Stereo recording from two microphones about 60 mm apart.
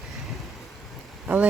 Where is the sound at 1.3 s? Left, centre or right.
Right.